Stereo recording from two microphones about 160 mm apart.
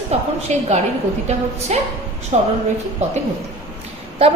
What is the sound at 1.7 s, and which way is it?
Speech, 45° right (ahead or behind).